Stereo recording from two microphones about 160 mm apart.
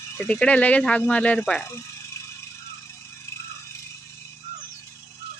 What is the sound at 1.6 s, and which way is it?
Speech, 15° left (ahead or behind).